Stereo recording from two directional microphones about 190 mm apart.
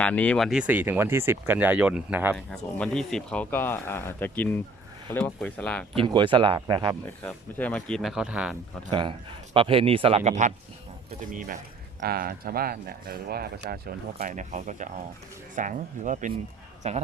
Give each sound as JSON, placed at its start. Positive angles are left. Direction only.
{"t": 0.0, "sound": "speech", "side_deg": 5}
{"t": 2.3, "sound": "speech", "side_deg": 5}
{"t": 6.0, "sound": "speech", "side_deg": -25}
{"t": 7.2, "sound": "speech", "side_deg": 5}
{"t": 8.9, "sound": "speech", "side_deg": -25}